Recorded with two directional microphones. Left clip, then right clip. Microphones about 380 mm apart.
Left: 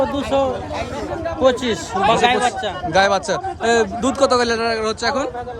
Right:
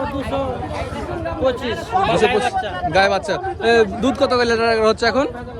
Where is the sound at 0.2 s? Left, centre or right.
Left.